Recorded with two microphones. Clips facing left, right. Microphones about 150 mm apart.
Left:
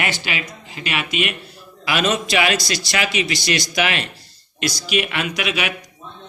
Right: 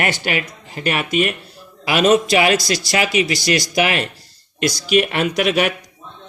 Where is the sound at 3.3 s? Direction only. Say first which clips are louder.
Right 4 dB; 25° left (ahead or behind).